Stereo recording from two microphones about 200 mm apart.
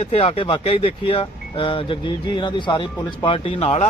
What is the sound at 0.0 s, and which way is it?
Speech, 30° left (ahead or behind).